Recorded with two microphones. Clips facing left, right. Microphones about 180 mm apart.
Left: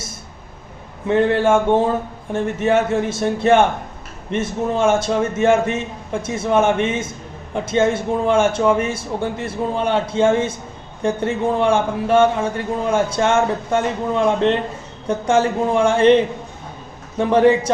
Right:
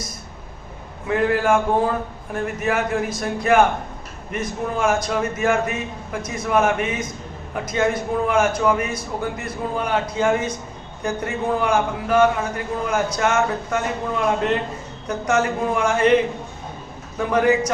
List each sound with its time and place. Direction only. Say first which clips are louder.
1.0 s a man's voice: left 4 dB; 30° left (ahead or behind)